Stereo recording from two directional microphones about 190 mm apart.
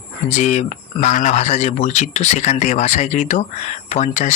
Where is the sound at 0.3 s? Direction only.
40° left (ahead or behind).